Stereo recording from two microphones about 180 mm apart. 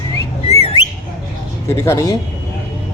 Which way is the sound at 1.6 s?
15° left (ahead or behind).